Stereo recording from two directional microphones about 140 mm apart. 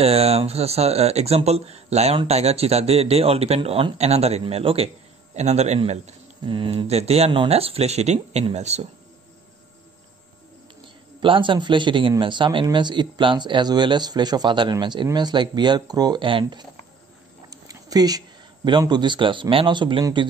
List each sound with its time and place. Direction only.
0.0 s speech: 45° right (ahead or behind)
6.4 s speech: 35° right (ahead or behind); by 8.8 s 50° right (ahead or behind)
11.1 s speech: 35° right (ahead or behind)
17.5 s a sound: 25° right (ahead or behind)
19.5 s speech: 35° right (ahead or behind)